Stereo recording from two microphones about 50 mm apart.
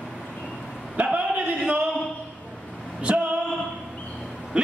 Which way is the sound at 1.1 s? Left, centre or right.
Right.